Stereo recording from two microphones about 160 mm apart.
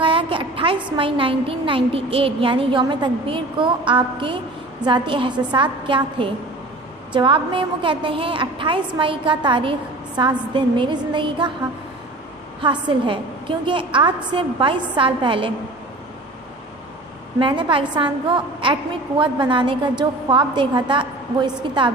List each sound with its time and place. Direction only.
0.0 s a sound: 35° right (ahead or behind)
0.9 s a woman's voice: 35° right (ahead or behind)
12.6 s a woman's voice: 30° right (ahead or behind)
17.4 s a woman's voice: 30° right (ahead or behind)